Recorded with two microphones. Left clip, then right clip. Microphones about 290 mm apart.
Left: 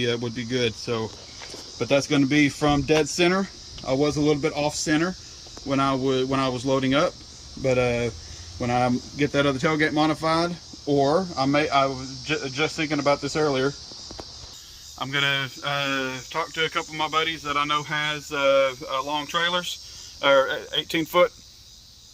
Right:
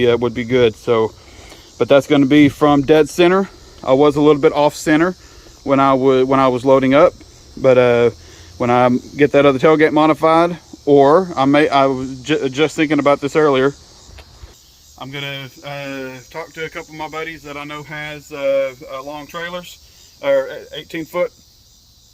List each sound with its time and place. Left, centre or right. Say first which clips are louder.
0.0 s speech: right 11 dB; centre
2.0 s speech: right 9 dB; centre
14.9 s speech: left 3 dB; centre